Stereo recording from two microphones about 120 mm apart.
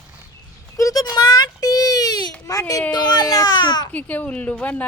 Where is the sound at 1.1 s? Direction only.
35° left (ahead or behind).